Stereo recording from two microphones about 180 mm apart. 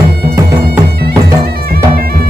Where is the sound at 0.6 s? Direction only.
60° right (ahead or behind).